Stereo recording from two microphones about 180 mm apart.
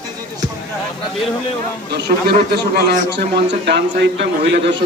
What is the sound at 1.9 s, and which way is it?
A man's voice, 65° right (ahead or behind).